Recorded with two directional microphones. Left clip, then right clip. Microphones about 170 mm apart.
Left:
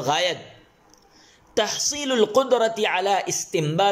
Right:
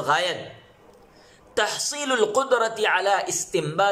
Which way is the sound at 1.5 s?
15° left (ahead or behind).